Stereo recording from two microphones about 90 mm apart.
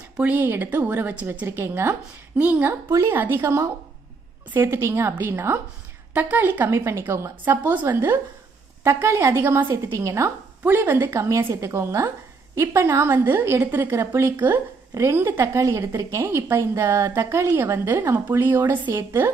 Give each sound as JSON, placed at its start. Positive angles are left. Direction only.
{"t": 0.2, "sound": "a woman's voice", "side_deg": -20}
{"t": 2.3, "sound": "a woman's voice", "side_deg": -15}
{"t": 3.4, "sound": "a woman's voice", "side_deg": -35}
{"t": 10.6, "sound": "a woman's voice", "side_deg": -25}